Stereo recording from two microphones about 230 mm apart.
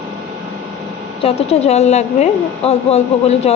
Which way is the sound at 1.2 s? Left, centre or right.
Left.